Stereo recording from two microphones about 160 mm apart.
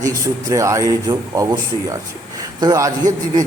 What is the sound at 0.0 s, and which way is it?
A man's voice, 20° right (ahead or behind).